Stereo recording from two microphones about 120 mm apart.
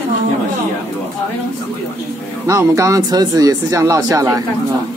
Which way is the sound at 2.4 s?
25° right (ahead or behind).